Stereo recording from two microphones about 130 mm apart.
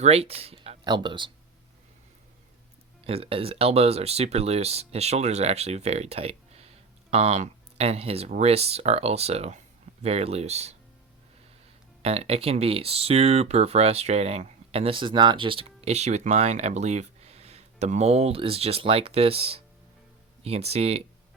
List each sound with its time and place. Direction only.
0.0 s speech: 50° right (ahead or behind)
0.9 s speech: 35° right (ahead or behind)
3.1 s speech: 45° right (ahead or behind)
12.0 s speech: 50° right (ahead or behind)